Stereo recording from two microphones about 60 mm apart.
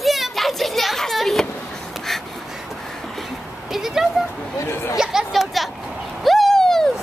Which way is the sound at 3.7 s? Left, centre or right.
Centre.